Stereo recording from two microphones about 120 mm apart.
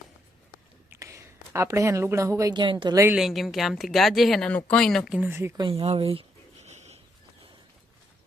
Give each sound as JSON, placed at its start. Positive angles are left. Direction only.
{"t": 0.9, "sound": "speech", "side_deg": -25}
{"t": 2.5, "sound": "a woman's voice", "side_deg": -40}
{"t": 3.2, "sound": "speech", "side_deg": 0}
{"t": 5.2, "sound": "speech", "side_deg": -20}
{"t": 5.5, "sound": "speech", "side_deg": -45}
{"t": 6.7, "sound": "bird", "side_deg": -70}